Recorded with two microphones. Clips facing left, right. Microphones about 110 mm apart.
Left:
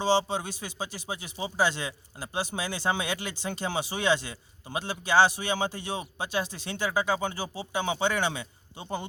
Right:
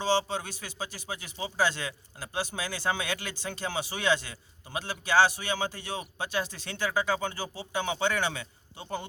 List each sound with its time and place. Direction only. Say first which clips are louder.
0.0 s speech: left 2 dB; 20° left (ahead or behind)